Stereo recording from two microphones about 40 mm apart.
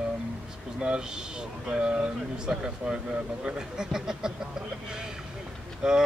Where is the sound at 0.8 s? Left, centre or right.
Centre.